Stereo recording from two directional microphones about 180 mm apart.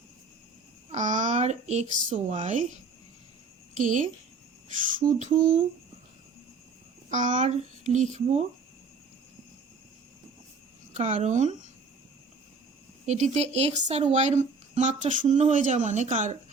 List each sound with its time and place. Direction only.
0.9 s child singing: 40° right (ahead or behind)
2.1 s speech: 35° right (ahead or behind)
3.8 s a sound: 45° right (ahead or behind)
7.1 s speech: 45° right (ahead or behind)
10.9 s speech: 40° right (ahead or behind)
13.1 s speech: 40° right (ahead or behind)